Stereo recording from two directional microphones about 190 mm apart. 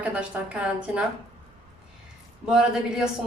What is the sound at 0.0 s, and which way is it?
A woman's voice, 5° right (ahead or behind).